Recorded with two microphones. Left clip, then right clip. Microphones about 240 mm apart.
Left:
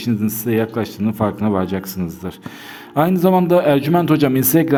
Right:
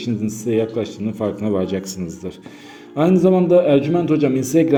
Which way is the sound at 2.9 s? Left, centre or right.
Left.